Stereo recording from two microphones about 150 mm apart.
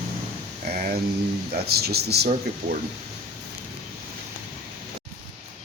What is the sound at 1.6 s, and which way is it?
Speech, 90° right.